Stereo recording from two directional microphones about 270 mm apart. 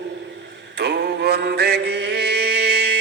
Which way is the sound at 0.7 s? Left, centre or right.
Right.